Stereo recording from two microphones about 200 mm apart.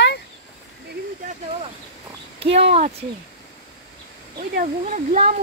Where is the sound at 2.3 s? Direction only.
30° right (ahead or behind).